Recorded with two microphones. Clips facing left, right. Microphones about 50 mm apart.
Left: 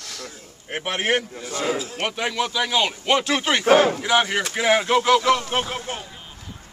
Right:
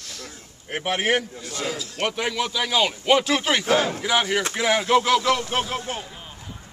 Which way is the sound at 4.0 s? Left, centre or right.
Centre.